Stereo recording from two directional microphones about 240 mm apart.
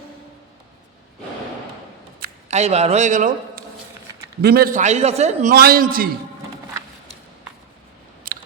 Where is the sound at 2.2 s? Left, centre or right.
Right.